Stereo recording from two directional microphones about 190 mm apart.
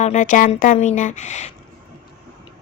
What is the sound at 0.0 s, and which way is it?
Speech, 40° left (ahead or behind).